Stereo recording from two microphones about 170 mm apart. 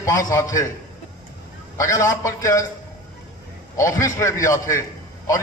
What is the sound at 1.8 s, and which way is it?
Speech, 20° left (ahead or behind).